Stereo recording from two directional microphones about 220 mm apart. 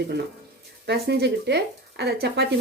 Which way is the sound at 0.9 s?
50° right (ahead or behind).